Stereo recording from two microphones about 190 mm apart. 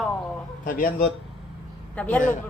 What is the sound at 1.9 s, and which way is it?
Speech, 5° left (ahead or behind).